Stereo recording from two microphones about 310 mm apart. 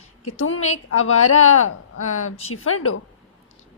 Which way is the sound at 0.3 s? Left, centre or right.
Left.